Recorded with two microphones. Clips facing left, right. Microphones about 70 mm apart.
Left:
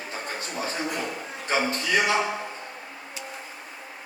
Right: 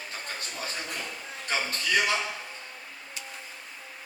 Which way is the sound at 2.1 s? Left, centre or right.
Left.